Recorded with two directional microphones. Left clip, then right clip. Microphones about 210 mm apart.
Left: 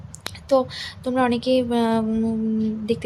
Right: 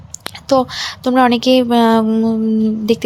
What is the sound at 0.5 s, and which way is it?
Speech, 20° right (ahead or behind).